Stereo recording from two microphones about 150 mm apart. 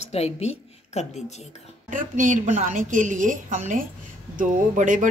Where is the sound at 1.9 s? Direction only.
60° right (ahead or behind).